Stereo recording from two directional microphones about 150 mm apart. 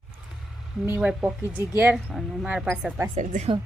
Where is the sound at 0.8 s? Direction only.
15° right (ahead or behind).